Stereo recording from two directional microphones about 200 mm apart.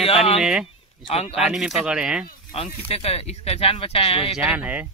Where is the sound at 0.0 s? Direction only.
30° left (ahead or behind).